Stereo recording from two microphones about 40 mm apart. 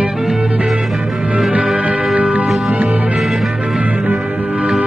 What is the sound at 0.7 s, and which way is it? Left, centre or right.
Music, centre.